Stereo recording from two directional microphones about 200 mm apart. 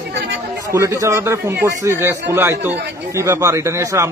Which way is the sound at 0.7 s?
15° right (ahead or behind).